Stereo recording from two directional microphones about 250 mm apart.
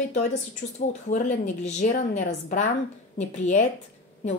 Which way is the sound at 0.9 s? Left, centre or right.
Left.